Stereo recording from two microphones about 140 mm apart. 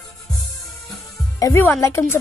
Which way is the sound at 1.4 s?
20° left (ahead or behind).